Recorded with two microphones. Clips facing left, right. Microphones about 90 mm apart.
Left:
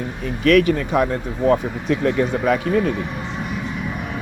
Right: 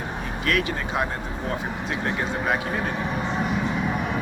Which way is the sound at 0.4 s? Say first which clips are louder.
Left 11 dB; 65° left (ahead or behind).